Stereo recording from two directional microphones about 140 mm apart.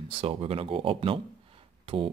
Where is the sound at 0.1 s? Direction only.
40° right (ahead or behind).